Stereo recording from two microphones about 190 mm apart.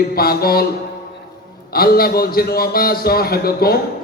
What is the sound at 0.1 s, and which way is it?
Speech, 55° left (ahead or behind).